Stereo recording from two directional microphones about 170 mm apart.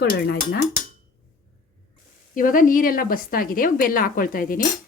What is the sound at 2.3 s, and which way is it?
A woman's voice, 50° left (ahead or behind).